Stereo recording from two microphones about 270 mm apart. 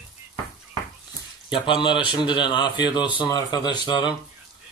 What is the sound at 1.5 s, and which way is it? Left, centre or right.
Speech, centre.